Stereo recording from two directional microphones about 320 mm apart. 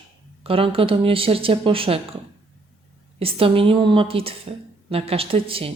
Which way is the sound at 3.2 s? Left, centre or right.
Centre.